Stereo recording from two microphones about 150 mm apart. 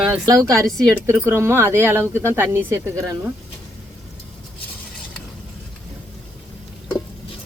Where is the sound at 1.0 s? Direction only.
15° right (ahead or behind).